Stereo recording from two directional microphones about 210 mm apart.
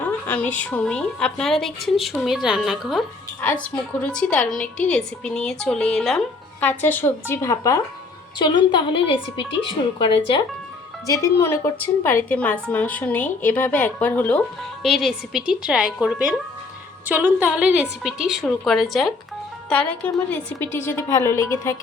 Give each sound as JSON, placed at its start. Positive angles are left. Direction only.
{"t": 0.0, "sound": "a woman's voice", "side_deg": 10}
{"t": 11.0, "sound": "a woman's voice", "side_deg": 15}